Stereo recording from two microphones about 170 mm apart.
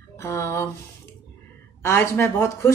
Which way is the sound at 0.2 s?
15° left (ahead or behind).